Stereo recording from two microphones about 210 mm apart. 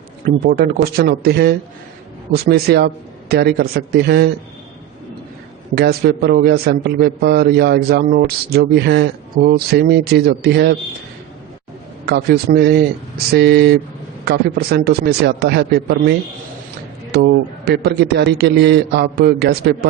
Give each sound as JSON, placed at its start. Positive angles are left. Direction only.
{"t": 0.3, "sound": "a man's voice", "side_deg": -45}
{"t": 5.7, "sound": "a man's voice", "side_deg": -50}
{"t": 12.0, "sound": "a man's voice", "side_deg": -50}
{"t": 17.7, "sound": "a man's voice", "side_deg": -50}